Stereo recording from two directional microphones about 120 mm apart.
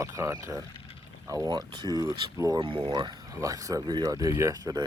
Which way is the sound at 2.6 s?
45° right (ahead or behind).